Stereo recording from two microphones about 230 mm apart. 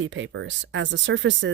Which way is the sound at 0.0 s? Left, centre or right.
Right.